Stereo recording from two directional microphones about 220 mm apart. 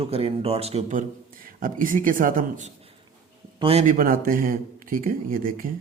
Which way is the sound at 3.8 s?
40° right (ahead or behind).